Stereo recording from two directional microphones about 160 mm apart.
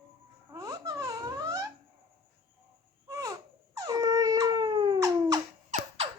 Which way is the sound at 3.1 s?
20° right (ahead or behind).